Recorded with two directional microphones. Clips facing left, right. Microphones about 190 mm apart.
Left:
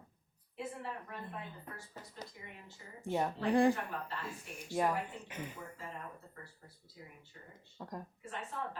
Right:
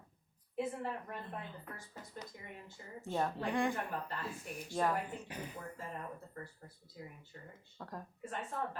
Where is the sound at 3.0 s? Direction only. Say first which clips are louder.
Left 2 dB; 15° left (ahead or behind).